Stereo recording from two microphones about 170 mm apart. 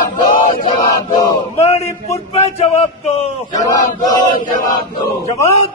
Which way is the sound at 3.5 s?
20° left (ahead or behind).